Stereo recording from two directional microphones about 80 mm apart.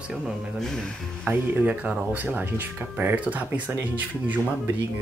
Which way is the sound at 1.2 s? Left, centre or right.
Right.